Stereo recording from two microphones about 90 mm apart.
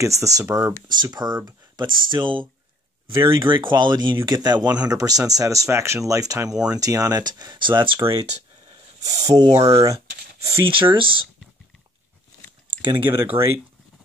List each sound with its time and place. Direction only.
0.0 s speech: 35° right (ahead or behind)
0.8 s speech: 55° right (ahead or behind)
9.0 s speech: 40° right (ahead or behind)
10.7 s speech: 70° right (ahead or behind)
12.9 s speech: 25° right (ahead or behind)